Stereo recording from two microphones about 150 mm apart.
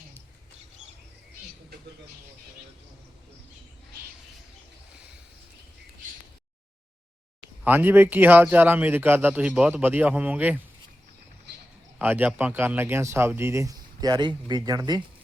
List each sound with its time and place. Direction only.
7.6 s a man's voice: 10° right (ahead or behind)
11.9 s a man's voice: 10° right (ahead or behind)